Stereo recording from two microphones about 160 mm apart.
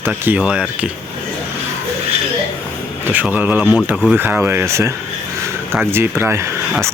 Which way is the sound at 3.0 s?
10° right (ahead or behind).